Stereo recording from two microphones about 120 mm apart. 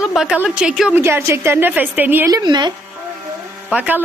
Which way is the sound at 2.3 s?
35° right (ahead or behind).